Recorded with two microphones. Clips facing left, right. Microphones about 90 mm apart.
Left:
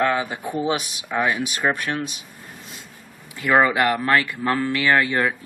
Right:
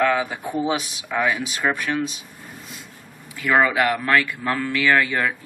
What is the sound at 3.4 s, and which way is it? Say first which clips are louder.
Speech: left 1 dB; 15° left (ahead or behind).